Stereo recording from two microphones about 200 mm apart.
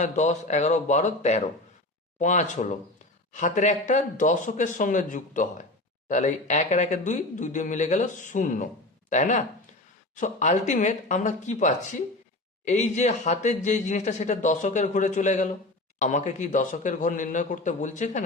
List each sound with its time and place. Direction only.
0.0 s speech: 35° left (ahead or behind)